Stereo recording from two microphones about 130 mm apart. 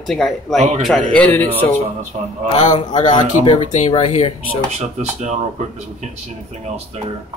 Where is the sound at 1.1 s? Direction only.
10° left (ahead or behind).